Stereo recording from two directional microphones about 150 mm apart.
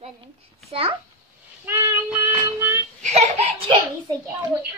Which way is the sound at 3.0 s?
50° right (ahead or behind).